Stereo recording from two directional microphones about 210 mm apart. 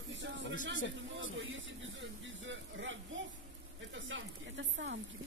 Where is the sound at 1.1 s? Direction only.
65° right (ahead or behind).